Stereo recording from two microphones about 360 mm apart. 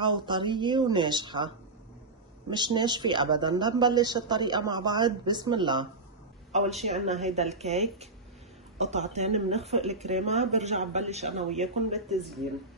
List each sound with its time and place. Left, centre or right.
0.0 s speech: centre
2.5 s speech: centre
11.9 s speech: centre